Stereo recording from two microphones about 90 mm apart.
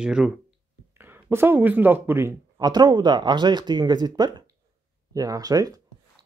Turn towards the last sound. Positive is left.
turn(degrees=-40)  # may be behind; listen again after turning